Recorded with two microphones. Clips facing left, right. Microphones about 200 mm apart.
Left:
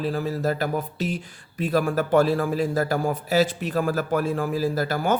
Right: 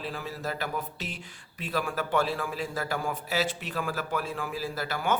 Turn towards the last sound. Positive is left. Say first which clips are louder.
# left 7 dB
turn(degrees=40)  # may be behind; listen again after turning